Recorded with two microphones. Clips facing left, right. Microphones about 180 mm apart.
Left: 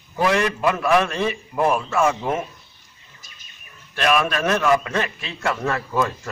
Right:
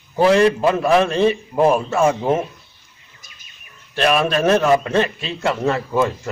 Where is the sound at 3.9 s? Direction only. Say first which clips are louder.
Right 3 dB; 30° right (ahead or behind).